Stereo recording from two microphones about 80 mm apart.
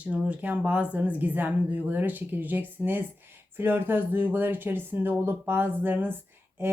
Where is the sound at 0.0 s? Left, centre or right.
Centre.